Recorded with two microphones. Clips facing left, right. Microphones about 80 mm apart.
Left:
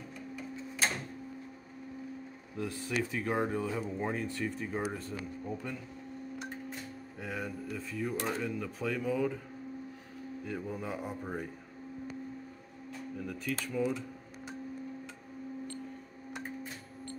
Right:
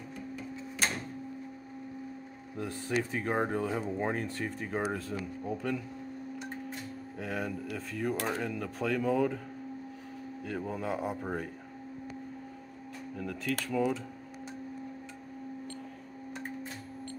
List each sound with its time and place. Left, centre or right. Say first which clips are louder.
2.5 s speech: right 2 dB; right
3.5 s speech: right 2 dB; right
7.2 s speech: right 3 dB; right
10.4 s speech: right 3 dB; right
13.2 s speech: right 3 dB; right